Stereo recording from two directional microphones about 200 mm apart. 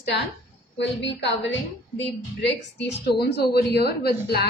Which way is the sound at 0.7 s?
60° left (ahead or behind).